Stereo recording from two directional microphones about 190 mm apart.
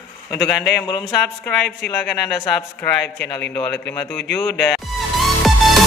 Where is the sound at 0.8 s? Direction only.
20° left (ahead or behind).